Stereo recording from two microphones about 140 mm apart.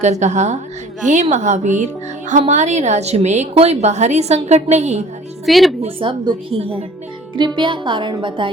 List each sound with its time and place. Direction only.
0.0 s a woman's voice: 55° right (ahead or behind)
5.5 s a woman's voice: centre (ahead or behind)
5.8 s a woman's voice: 40° right (ahead or behind)